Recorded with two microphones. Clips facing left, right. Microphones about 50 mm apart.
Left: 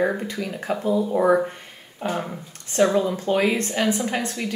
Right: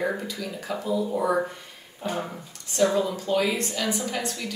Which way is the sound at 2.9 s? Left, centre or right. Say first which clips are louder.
Left 3 dB; left.